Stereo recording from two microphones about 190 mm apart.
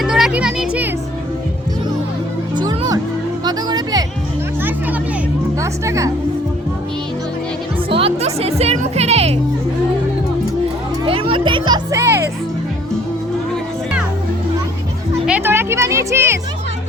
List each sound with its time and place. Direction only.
0.0 s music: 5° right (ahead or behind)
2.6 s music: 20° right (ahead or behind)
5.5 s music: 15° right (ahead or behind)
7.9 s music: 30° right (ahead or behind)
11.0 s music: 25° right (ahead or behind)
15.3 s music: 10° right (ahead or behind)